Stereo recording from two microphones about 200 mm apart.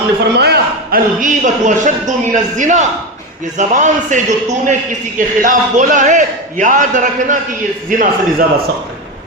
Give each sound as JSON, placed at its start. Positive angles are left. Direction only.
{"t": 0.3, "sound": "a man's voice", "side_deg": -55}